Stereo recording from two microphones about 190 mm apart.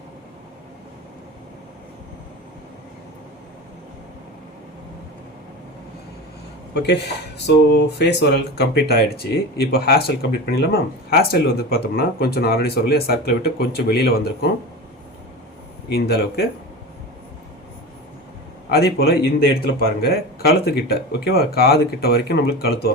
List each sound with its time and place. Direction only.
6.7 s a man's voice: 65° left (ahead or behind)
15.9 s a man's voice: 55° left (ahead or behind)
18.7 s a man's voice: 55° left (ahead or behind)